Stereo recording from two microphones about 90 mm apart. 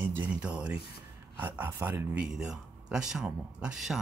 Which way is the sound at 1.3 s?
25° right (ahead or behind).